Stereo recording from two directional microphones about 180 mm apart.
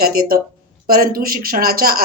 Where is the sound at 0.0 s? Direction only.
55° right (ahead or behind).